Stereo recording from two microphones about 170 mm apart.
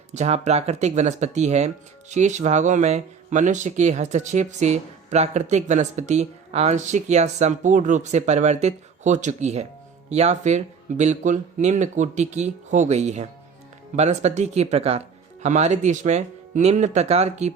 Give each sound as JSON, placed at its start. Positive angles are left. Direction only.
{"t": 0.1, "sound": "speech", "side_deg": -40}